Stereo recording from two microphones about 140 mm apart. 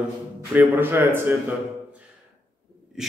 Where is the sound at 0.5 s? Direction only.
15° right (ahead or behind).